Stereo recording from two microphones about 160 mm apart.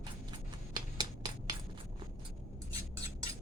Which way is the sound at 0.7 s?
25° right (ahead or behind).